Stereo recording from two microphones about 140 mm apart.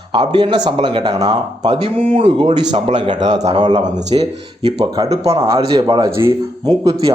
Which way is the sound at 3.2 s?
55° right (ahead or behind).